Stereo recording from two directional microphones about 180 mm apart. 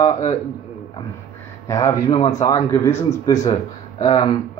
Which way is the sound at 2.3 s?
15° left (ahead or behind).